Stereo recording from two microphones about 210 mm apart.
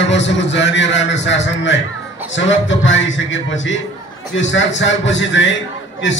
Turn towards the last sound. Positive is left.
turn(degrees=60)  # may be behind; listen again after turning